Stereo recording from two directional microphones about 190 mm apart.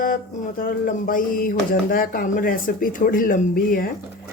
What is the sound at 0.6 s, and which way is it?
Speech, 45° left (ahead or behind).